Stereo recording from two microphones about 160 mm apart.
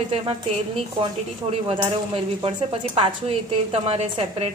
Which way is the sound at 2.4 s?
35° right (ahead or behind).